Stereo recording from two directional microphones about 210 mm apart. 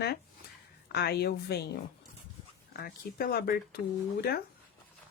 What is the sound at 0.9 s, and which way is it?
A woman's voice, 50° left (ahead or behind).